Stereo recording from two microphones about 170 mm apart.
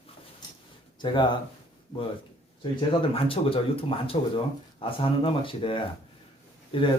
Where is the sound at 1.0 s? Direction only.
30° left (ahead or behind).